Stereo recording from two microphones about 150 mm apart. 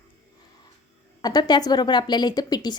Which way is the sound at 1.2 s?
25° left (ahead or behind).